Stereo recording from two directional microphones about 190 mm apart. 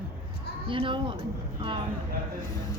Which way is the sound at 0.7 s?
25° right (ahead or behind).